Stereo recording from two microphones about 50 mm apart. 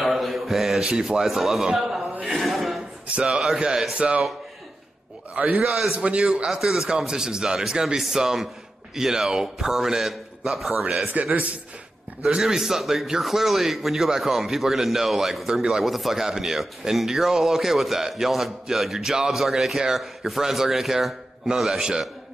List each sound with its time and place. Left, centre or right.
0.0 s mantra: centre
0.8 s a man's voice: centre
2.2 s a sound: centre
3.3 s speech: centre
5.3 s a man's voice: right; by 10.9 s centre
11.2 s a man's voice: right
12.4 s speech: centre